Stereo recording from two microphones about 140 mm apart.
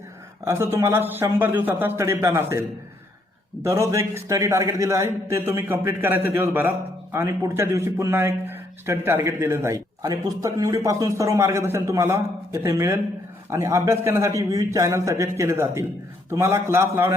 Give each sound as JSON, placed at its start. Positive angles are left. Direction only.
{"t": 0.4, "sound": "a man's voice", "side_deg": -15}